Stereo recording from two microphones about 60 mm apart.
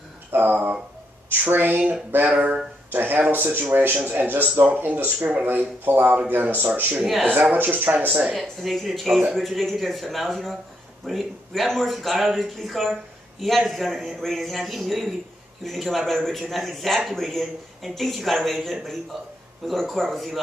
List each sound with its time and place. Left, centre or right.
0.3 s speech: right
2.9 s speech: right
8.4 s speech: centre